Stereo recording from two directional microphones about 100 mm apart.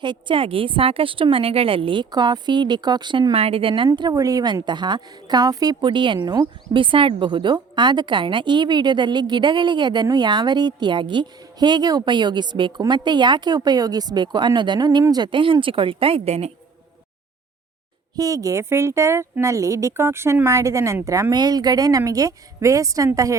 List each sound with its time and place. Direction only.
0.0 s speech: 55° right (ahead or behind)
2.0 s a woman's voice: 45° right (ahead or behind)
3.3 s a woman's voice: 75° right (ahead or behind)
4.1 s a woman's voice: 35° right (ahead or behind); by 6.1 s 55° right (ahead or behind)
6.2 s speech: 40° right (ahead or behind)
6.7 s a woman's voice: 60° right (ahead or behind); by 16.5 s 90° right
18.2 s speech: 35° right (ahead or behind)